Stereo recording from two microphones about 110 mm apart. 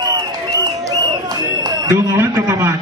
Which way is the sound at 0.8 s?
35° right (ahead or behind).